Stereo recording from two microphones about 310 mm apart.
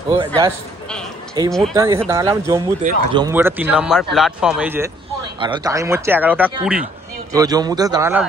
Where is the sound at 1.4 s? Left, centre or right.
Centre.